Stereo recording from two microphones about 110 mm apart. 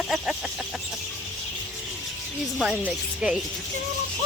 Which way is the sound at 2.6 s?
5° right (ahead or behind).